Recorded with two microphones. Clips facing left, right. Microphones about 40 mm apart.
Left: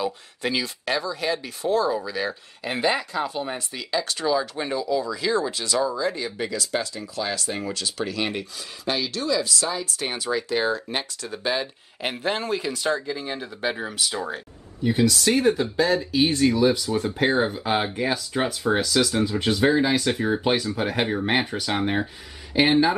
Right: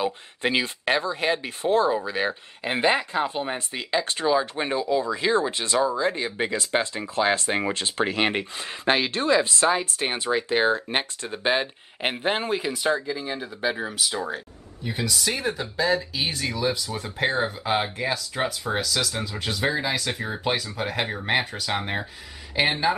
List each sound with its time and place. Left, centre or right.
0.0 s speech: right; by 13.0 s centre
13.0 s speech: centre